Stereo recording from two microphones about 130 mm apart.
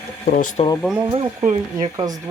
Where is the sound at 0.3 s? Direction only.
80° left.